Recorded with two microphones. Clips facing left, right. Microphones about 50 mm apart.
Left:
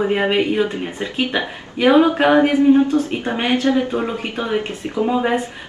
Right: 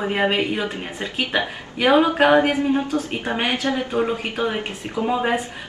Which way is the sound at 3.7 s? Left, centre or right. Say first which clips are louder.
Left 3 dB; left.